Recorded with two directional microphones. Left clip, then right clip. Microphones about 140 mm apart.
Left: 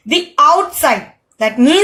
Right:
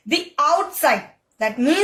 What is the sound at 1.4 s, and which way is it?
Speech, 35° left (ahead or behind).